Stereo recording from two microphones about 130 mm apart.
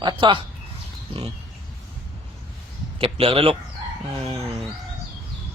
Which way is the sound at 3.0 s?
45° right (ahead or behind).